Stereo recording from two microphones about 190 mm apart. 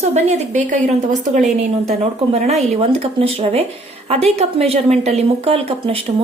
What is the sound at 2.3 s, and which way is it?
A woman's voice, 35° right (ahead or behind).